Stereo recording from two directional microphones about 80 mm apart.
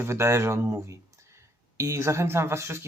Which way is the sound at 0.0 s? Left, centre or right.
Right.